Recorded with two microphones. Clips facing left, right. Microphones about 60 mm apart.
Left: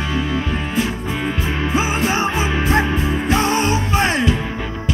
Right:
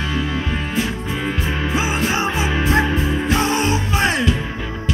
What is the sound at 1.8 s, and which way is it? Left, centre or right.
Music, left.